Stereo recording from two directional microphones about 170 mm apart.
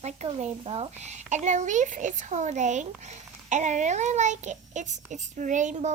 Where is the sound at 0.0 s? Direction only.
40° right (ahead or behind).